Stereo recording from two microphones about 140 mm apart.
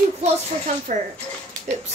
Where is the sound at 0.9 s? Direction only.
65° right (ahead or behind).